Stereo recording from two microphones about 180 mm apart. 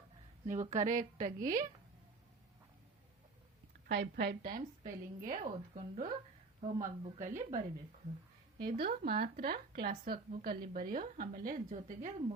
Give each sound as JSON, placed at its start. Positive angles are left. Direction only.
{"t": 0.4, "sound": "a woman's voice", "side_deg": -45}
{"t": 3.8, "sound": "speech", "side_deg": -65}
{"t": 4.8, "sound": "a woman's voice", "side_deg": -45}
{"t": 8.5, "sound": "a woman's voice", "side_deg": -55}